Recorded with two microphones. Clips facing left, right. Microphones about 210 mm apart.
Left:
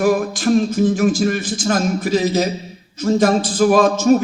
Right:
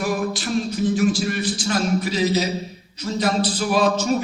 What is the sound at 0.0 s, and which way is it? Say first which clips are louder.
A man's voice: left 7 dB; 50° left (ahead or behind).